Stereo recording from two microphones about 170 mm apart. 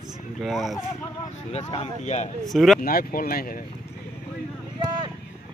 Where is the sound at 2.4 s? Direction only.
Centre (ahead or behind).